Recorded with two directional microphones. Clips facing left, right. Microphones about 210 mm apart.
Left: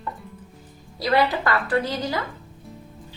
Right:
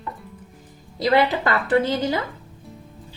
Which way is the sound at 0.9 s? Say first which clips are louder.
Right 2 dB; 20° right (ahead or behind).